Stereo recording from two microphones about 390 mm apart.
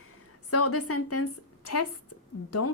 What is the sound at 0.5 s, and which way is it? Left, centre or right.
A woman's voice, left.